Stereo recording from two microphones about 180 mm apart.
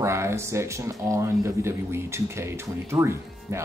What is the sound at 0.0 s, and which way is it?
Speech, 15° right (ahead or behind).